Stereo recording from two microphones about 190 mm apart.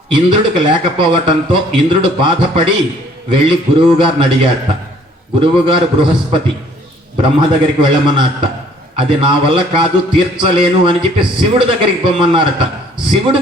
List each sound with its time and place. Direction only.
0.1 s a man's voice: 25° right (ahead or behind)